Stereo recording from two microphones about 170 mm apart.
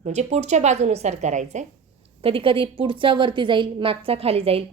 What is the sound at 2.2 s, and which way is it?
A woman's voice, 30° right (ahead or behind).